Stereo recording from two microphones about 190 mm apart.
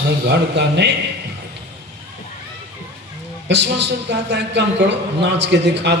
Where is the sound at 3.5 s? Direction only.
65° right (ahead or behind).